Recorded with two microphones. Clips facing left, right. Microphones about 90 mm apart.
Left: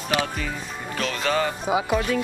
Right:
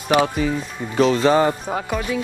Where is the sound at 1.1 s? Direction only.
30° right (ahead or behind).